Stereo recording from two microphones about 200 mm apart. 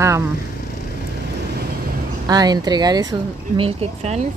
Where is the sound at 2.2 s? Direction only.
20° right (ahead or behind).